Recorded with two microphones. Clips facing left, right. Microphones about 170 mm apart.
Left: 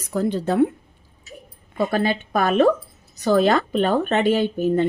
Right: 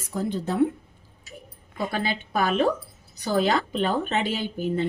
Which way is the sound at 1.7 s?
55° left (ahead or behind).